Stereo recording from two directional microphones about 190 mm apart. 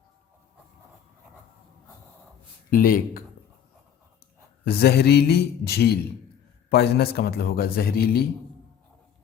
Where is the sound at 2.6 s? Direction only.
50° left (ahead or behind).